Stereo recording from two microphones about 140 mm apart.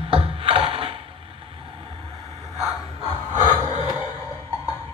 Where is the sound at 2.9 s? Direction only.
40° right (ahead or behind).